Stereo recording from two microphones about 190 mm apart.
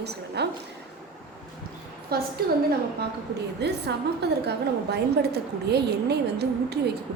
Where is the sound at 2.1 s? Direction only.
55° right (ahead or behind).